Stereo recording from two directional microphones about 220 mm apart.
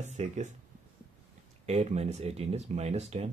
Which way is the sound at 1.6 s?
30° right (ahead or behind).